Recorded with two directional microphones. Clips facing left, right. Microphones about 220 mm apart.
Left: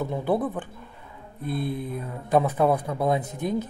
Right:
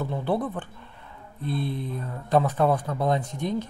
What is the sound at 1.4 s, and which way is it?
Mantra, 50° left (ahead or behind).